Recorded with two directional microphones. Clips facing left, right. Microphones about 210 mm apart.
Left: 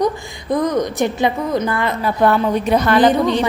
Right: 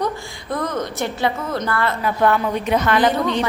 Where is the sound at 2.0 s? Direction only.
35° left (ahead or behind).